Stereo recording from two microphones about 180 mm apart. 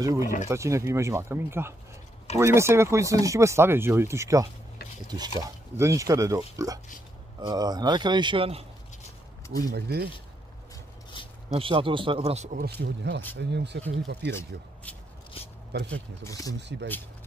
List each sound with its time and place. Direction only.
0.0 s a man's voice: 20° right (ahead or behind)
9.6 s speech: 60° right (ahead or behind)
11.2 s a sound: 25° left (ahead or behind)
11.5 s speech: 30° right (ahead or behind); by 12.7 s 45° right (ahead or behind)
12.8 s speech: 70° right (ahead or behind)
14.5 s speech: 55° right (ahead or behind)
15.3 s a sound: 30° left (ahead or behind)
15.7 s speech: 70° right (ahead or behind)
16.3 s speech: 20° left (ahead or behind)